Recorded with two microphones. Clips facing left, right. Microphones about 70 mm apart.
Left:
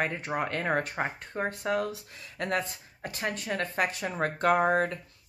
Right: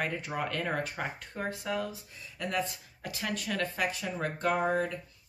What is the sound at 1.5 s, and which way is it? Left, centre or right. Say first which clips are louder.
Speech: left 4 dB; left.